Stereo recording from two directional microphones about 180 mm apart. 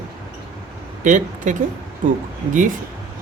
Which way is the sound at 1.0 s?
40° right (ahead or behind).